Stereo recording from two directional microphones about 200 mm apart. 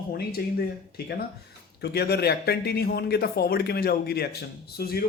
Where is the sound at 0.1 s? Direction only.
50° left (ahead or behind).